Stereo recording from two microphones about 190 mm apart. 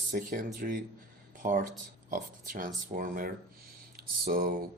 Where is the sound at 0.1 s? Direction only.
45° right (ahead or behind).